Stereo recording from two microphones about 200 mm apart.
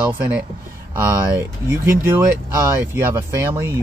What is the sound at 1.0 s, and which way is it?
Speech, 10° right (ahead or behind).